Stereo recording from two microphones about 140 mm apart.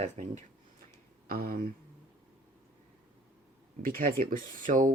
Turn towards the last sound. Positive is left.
turn(degrees=-65)  # may be behind; listen again after turning